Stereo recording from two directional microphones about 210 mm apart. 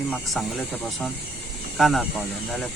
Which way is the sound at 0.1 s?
Centre (ahead or behind).